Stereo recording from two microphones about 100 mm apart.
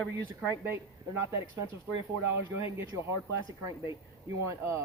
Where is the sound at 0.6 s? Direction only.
25° right (ahead or behind).